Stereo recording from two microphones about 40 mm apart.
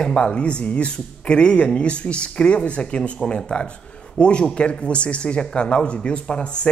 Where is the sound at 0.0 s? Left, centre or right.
Left.